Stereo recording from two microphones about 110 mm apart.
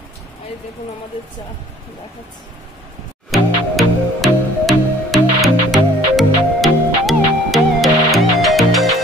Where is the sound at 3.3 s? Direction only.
Centre (ahead or behind).